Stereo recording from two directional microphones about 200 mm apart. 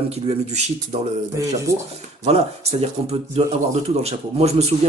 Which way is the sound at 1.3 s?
15° right (ahead or behind).